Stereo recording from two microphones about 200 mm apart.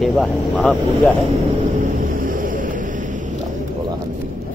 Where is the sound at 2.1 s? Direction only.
45° right (ahead or behind).